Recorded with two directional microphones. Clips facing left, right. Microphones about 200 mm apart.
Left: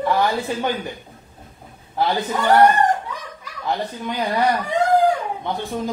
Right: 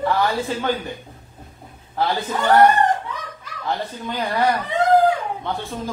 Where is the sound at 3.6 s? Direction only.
15° left (ahead or behind).